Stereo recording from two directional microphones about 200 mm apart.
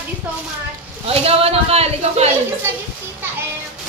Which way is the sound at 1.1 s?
30° right (ahead or behind).